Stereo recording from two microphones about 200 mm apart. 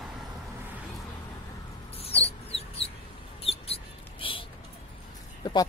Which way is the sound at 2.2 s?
30° left (ahead or behind).